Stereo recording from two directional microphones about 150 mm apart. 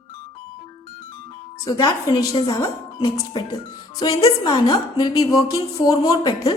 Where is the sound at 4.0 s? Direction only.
25° left (ahead or behind).